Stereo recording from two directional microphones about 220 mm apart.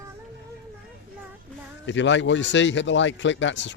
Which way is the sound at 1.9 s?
55° left (ahead or behind).